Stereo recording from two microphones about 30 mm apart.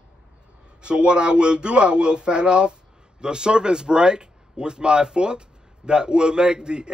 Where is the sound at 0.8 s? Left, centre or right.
Right.